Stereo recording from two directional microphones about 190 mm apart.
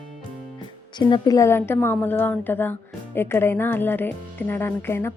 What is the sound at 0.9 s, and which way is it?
A woman's voice, 25° left (ahead or behind).